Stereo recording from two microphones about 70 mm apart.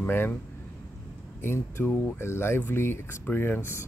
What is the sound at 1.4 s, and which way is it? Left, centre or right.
Speech, left.